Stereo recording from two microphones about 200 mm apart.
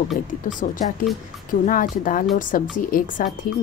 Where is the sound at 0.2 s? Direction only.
40° left (ahead or behind).